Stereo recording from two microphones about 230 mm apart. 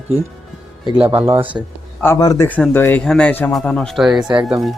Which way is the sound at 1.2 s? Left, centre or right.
Centre.